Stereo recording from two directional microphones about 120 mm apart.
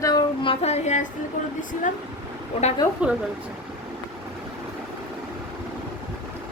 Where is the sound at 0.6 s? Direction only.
65° left (ahead or behind).